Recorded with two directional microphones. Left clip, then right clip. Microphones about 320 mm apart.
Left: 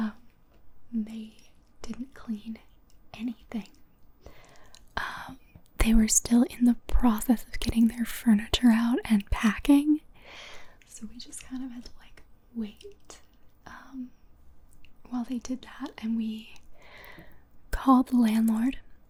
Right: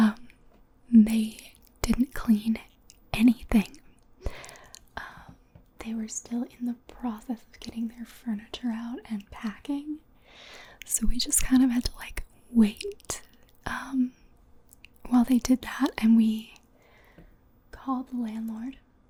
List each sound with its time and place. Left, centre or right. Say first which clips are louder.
0.9 s whispering: right 14 dB; right
4.2 s a sound: right 11 dB; right
4.9 s whispering: left 7 dB; left
5.7 s speech: left 11 dB; left; by 10.5 s centre
10.8 s speech: right 15 dB; right
16.8 s a sound: left 9 dB; left
17.7 s a woman's voice: left 10 dB; left